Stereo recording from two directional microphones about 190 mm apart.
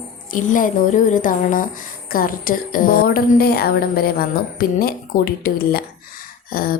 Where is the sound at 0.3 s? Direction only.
45° left (ahead or behind).